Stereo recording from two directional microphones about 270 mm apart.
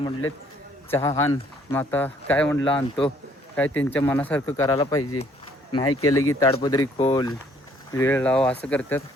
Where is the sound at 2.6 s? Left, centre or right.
Centre.